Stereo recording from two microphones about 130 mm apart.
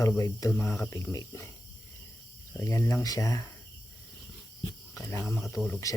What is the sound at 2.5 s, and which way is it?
Speech, 20° left (ahead or behind).